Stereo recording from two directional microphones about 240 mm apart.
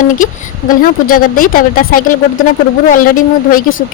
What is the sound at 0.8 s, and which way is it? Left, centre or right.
A woman's voice, left.